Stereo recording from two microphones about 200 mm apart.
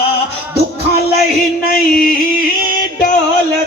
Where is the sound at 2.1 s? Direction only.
45° left (ahead or behind).